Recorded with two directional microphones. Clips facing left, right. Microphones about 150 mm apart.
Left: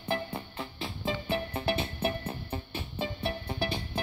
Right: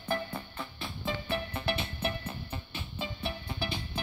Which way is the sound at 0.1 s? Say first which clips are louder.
Left 1 dB; 25° left (ahead or behind).